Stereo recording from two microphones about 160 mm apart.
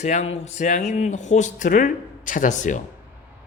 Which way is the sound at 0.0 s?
45° left (ahead or behind).